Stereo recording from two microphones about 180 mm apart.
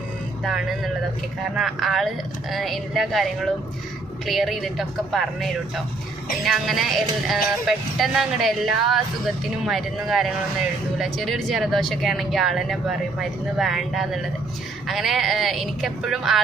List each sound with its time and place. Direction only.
0.5 s music: centre (ahead or behind)